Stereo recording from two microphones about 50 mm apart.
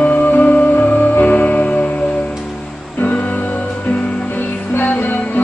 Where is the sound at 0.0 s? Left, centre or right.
Left.